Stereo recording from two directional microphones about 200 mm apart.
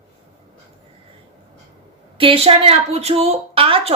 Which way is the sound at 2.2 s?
25° right (ahead or behind).